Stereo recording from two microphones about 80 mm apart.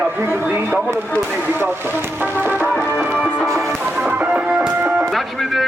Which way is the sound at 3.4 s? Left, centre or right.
Right.